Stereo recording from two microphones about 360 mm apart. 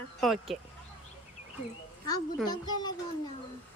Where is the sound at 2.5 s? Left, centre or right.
Centre.